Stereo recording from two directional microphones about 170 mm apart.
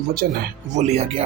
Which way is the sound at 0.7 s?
40° right (ahead or behind).